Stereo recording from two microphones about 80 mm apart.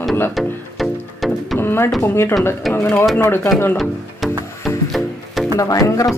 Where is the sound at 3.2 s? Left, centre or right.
Left.